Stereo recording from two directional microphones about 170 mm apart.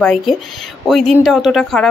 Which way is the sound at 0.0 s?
5° left (ahead or behind).